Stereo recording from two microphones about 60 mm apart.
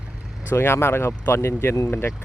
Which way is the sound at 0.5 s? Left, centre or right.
Left.